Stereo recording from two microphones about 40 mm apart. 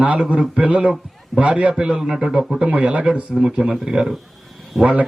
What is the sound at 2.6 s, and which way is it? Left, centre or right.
Speech, right.